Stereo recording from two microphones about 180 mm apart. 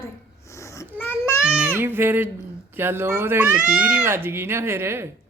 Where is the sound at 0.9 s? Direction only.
10° left (ahead or behind).